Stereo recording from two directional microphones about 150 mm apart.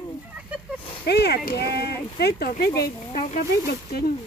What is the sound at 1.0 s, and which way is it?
Speech, 90° left.